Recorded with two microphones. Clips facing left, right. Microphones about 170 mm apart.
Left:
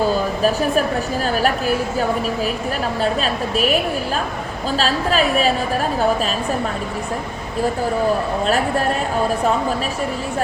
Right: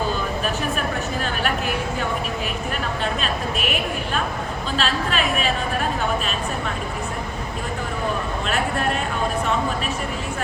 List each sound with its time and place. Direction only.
0.9 s a woman's voice: 35° left (ahead or behind)